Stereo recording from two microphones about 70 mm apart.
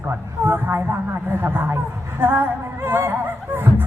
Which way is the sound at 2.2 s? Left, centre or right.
Right.